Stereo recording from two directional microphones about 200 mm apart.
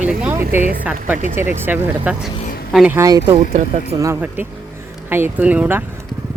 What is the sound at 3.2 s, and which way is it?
Speech, 35° right (ahead or behind).